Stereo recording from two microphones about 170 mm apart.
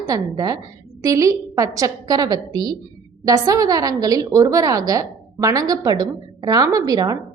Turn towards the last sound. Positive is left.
turn(degrees=-20)  # may be behind; listen again after turning